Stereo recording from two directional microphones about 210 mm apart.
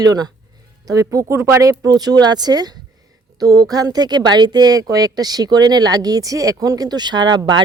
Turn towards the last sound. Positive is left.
turn(degrees=-20)  # may be behind; listen again after turning